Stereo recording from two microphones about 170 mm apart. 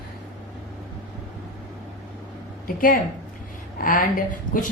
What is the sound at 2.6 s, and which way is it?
A woman's voice, 55° left (ahead or behind).